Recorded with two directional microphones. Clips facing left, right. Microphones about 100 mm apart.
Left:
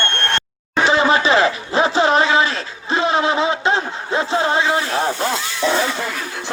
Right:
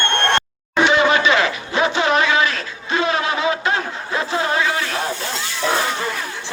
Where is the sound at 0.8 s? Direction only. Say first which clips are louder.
Left 1 dB; 30° left (ahead or behind).